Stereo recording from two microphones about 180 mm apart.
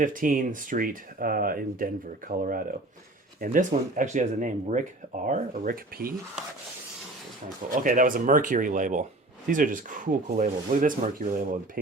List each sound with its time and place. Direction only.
0.0 s speech: 50° right (ahead or behind)
7.7 s speech: 50° right (ahead or behind)